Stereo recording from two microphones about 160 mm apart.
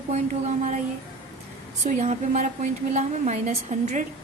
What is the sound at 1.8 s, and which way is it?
A woman's voice, 45° right (ahead or behind).